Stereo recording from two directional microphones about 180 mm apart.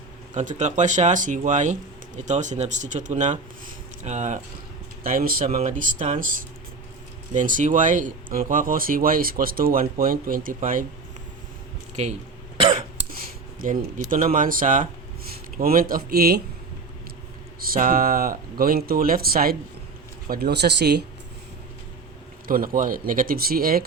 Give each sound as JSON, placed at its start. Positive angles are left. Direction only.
{"t": 0.3, "sound": "speech", "side_deg": -45}
{"t": 12.5, "sound": "cough", "side_deg": -25}
{"t": 13.1, "sound": "a sound", "side_deg": -50}
{"t": 14.1, "sound": "speech", "side_deg": -50}
{"t": 17.6, "sound": "speech", "side_deg": -50}
{"t": 22.4, "sound": "speech", "side_deg": -50}